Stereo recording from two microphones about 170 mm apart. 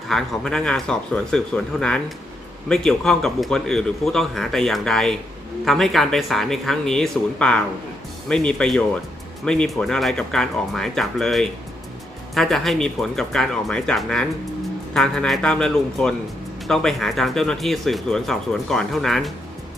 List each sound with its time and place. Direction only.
0.1 s speech: 5° left (ahead or behind)